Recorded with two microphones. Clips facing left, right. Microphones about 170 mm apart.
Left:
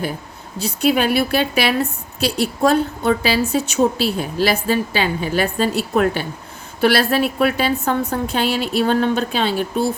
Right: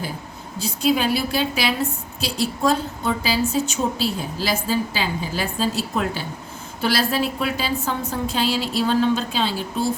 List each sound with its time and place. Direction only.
0.6 s a woman's voice: 65° left (ahead or behind)